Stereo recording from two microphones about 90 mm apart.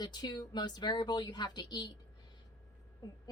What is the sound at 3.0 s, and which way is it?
Speech, 50° left (ahead or behind).